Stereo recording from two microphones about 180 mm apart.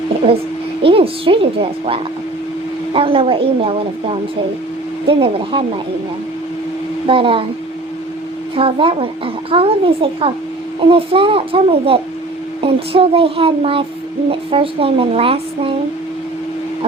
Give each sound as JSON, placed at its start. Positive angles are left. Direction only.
{"t": 0.8, "sound": "a sound", "side_deg": -30}
{"t": 2.9, "sound": "a child's voice", "side_deg": -30}
{"t": 7.1, "sound": "speech", "side_deg": -30}
{"t": 8.5, "sound": "a child's voice", "side_deg": -30}